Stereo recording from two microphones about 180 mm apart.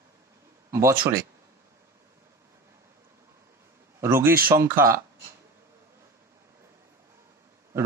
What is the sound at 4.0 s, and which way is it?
Speech, 15° right (ahead or behind).